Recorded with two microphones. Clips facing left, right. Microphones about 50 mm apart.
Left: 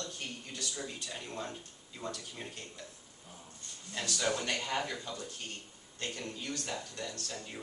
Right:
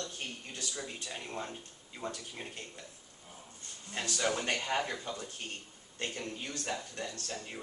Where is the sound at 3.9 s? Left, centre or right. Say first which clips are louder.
Right 1 dB; right.